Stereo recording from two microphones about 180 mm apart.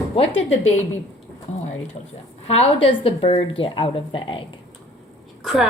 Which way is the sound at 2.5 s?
35° left (ahead or behind).